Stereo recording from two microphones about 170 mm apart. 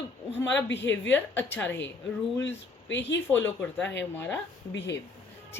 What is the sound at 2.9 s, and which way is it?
Speech, 90° left.